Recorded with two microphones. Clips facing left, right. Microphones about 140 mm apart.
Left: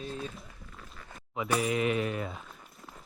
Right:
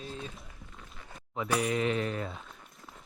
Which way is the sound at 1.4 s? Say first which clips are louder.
Left 1 dB; centre (ahead or behind).